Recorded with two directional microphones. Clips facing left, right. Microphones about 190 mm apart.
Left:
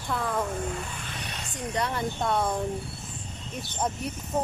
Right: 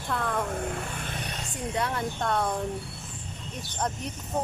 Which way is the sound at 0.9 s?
50° right (ahead or behind).